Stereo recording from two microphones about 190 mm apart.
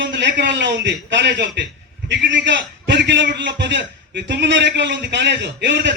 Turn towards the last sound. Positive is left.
turn(degrees=-65)  # may be behind; listen again after turning